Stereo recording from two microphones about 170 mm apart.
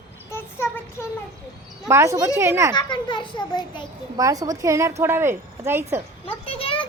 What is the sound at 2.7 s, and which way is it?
A child's voice, 25° left (ahead or behind).